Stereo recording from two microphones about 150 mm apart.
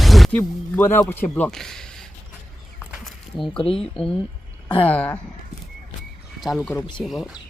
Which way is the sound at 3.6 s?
40° left (ahead or behind).